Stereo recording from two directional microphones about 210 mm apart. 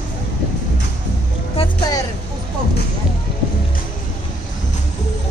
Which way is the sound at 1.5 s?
25° left (ahead or behind).